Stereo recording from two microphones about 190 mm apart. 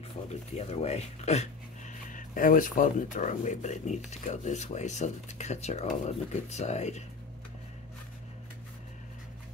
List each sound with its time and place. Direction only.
0.6 s speech: 35° left (ahead or behind)